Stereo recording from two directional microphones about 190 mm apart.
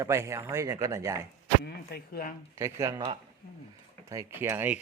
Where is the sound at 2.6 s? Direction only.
15° right (ahead or behind).